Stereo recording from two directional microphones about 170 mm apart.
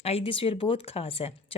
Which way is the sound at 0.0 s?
35° left (ahead or behind).